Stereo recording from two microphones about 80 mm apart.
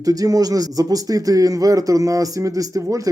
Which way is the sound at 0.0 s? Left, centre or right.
Right.